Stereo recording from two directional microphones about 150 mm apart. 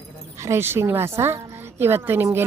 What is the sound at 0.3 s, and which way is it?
A woman's voice, 20° right (ahead or behind).